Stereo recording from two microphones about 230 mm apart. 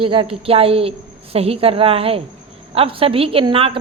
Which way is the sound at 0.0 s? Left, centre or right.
Right.